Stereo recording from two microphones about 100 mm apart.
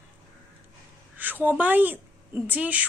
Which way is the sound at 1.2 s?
20° right (ahead or behind).